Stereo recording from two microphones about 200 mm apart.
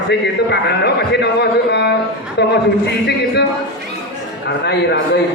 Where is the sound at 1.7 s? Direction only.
60° left (ahead or behind).